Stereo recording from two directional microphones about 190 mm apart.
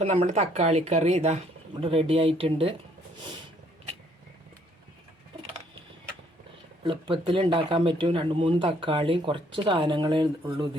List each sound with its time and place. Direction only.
0.0 s speech: 35° right (ahead or behind)
6.8 s speech: 25° right (ahead or behind)